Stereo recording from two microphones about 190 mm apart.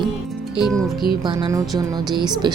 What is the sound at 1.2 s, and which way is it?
Speech, 25° right (ahead or behind).